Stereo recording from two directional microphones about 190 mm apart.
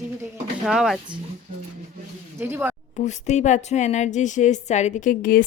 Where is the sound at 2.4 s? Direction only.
10° right (ahead or behind).